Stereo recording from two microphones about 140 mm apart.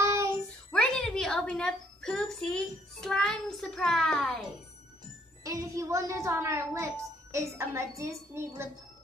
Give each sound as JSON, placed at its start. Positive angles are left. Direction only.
{"t": 0.0, "sound": "child singing", "side_deg": -20}
{"t": 0.7, "sound": "a woman's voice", "side_deg": 5}
{"t": 5.4, "sound": "a child's voice", "side_deg": -25}